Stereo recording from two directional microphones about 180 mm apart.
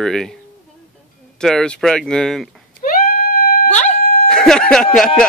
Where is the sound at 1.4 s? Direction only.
5° left (ahead or behind).